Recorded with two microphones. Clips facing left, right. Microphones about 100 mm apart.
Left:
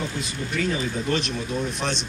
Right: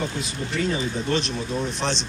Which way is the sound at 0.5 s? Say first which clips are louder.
Right 1 dB; 30° right (ahead or behind).